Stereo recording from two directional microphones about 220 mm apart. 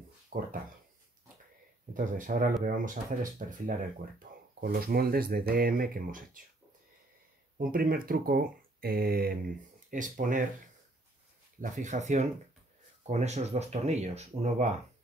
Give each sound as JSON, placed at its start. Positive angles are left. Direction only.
{"t": 0.3, "sound": "speech", "side_deg": -40}
{"t": 2.0, "sound": "speech", "side_deg": -35}
{"t": 7.5, "sound": "speech", "side_deg": -40}
{"t": 11.6, "sound": "speech", "side_deg": -35}